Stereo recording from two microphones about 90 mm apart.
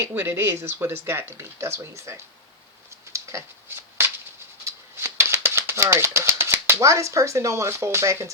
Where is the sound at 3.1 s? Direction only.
35° right (ahead or behind).